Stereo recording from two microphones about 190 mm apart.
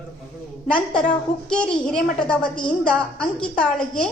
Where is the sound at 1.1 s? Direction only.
5° left (ahead or behind).